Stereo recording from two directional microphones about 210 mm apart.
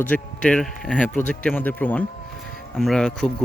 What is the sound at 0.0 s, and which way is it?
Speech, 5° left (ahead or behind).